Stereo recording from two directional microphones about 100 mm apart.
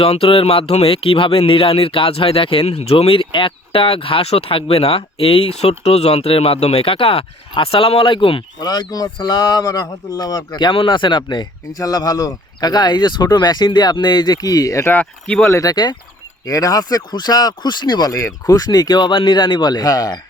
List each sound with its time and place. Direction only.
0.0 s speech: 70° left (ahead or behind)
8.6 s speech: 40° left (ahead or behind)
11.7 s speech: 35° left (ahead or behind)
14.9 s speech: 15° left (ahead or behind)
15.4 s speech: 30° left (ahead or behind)
15.7 s speech: 45° left (ahead or behind)